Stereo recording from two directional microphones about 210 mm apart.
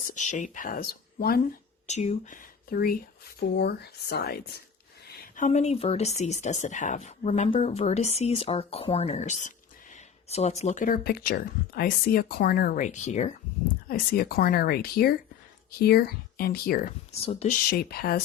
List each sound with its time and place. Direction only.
0.1 s speech: 35° left (ahead or behind)
1.9 s speech: 35° left (ahead or behind); by 4.6 s 50° left (ahead or behind)
5.0 s a sound: 50° left (ahead or behind)
5.5 s speech: 30° left (ahead or behind)
13.8 s speech: 45° left (ahead or behind)